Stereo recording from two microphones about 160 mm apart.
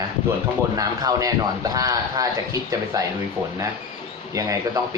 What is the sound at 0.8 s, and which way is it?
A man's voice, 20° right (ahead or behind).